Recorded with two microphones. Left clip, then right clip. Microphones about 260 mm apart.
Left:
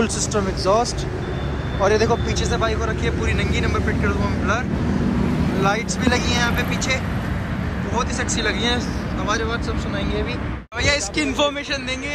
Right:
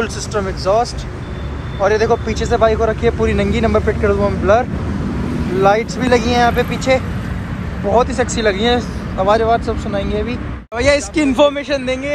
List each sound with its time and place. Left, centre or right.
0.4 s speech: centre